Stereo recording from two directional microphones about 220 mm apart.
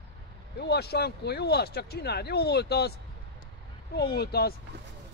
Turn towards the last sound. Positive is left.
turn(degrees=45)  # may be behind; listen again after turning